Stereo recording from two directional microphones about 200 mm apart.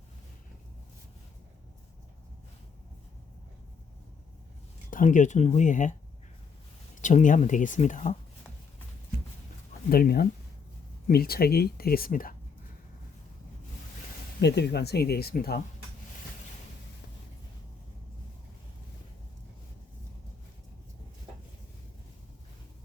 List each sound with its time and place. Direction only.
4.9 s speech: 40° left (ahead or behind)
7.0 s speech: 40° left (ahead or behind)
9.9 s speech: 45° left (ahead or behind)
14.3 s speech: 55° left (ahead or behind)